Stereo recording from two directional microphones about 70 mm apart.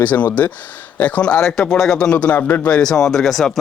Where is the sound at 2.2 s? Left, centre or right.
Left.